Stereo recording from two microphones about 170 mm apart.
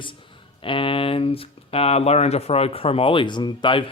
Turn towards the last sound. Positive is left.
turn(degrees=25)  # may be behind; listen again after turning